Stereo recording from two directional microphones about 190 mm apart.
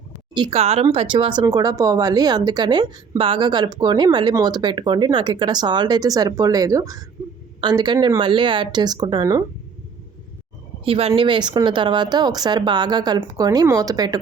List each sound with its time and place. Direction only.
0.3 s speech: 30° right (ahead or behind)
10.8 s speech: 30° right (ahead or behind)